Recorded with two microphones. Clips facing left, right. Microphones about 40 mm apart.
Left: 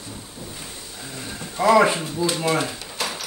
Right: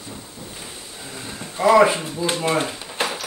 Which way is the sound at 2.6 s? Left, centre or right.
Right.